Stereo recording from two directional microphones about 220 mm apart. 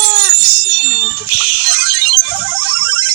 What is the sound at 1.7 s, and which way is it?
Music, 45° right (ahead or behind).